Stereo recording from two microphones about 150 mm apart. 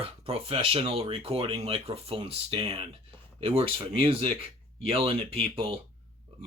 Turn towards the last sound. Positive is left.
turn(degrees=-40)  # may be behind; listen again after turning